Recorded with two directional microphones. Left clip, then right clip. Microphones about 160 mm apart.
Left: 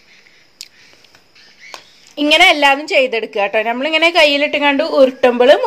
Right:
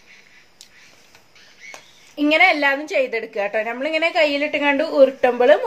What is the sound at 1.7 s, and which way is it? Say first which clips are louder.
Speech: left 5 dB; 55° left (ahead or behind).